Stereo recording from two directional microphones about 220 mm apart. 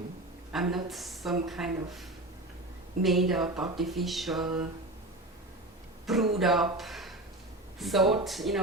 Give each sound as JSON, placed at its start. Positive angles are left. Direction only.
{"t": 0.5, "sound": "speech", "side_deg": 0}
{"t": 6.1, "sound": "speech", "side_deg": 0}